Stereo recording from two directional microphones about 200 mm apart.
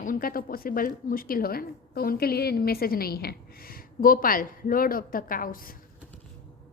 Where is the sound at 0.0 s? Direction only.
45° left (ahead or behind).